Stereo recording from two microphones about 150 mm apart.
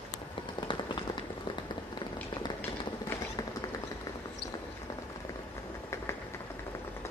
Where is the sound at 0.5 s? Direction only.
35° left (ahead or behind).